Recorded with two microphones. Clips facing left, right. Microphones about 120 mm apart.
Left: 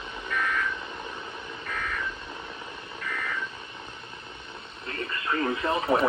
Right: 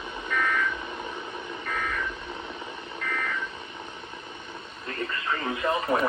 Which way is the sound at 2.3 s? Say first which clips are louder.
Right 3 dB; 25° right (ahead or behind).